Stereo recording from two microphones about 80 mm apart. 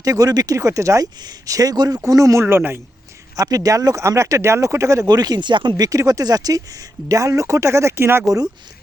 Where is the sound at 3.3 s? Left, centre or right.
Right.